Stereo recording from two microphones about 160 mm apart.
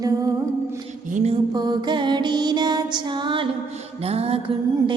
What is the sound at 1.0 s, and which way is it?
Music, 50° right (ahead or behind).